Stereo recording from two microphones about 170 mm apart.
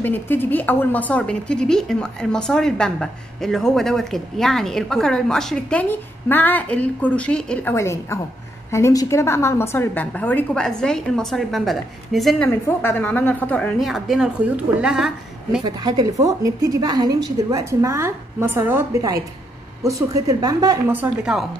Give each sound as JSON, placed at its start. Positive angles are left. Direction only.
{"t": 0.0, "sound": "a woman's voice", "side_deg": 10}
{"t": 12.4, "sound": "a woman's voice", "side_deg": 15}
{"t": 15.6, "sound": "a woman's voice", "side_deg": -25}
{"t": 20.9, "sound": "a woman's voice", "side_deg": -10}